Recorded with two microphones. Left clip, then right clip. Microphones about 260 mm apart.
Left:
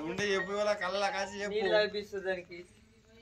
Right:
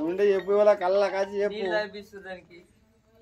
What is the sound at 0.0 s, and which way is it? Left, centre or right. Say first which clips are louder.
Speech: right 9 dB; right.